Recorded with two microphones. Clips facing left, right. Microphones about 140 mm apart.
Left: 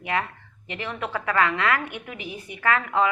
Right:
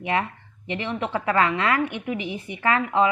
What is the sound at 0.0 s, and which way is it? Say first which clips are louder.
A woman's voice: right 2 dB; 25° right (ahead or behind).